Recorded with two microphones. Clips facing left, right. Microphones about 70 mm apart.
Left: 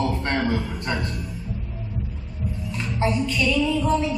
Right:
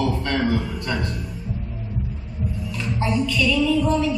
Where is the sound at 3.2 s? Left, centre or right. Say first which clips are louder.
Right 2 dB; left.